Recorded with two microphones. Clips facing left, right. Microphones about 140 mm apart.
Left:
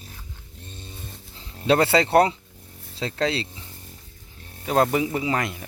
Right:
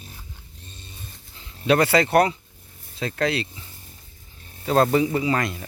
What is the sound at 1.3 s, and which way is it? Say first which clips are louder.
Speech: even; 30° left (ahead or behind).